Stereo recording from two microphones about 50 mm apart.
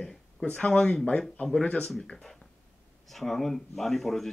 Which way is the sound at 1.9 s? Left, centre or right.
Centre.